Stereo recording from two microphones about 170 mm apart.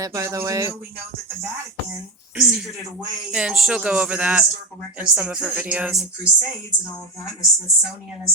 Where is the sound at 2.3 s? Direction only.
5° right (ahead or behind).